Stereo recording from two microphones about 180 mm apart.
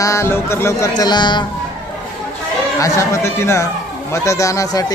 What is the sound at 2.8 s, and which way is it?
Speech, 15° left (ahead or behind).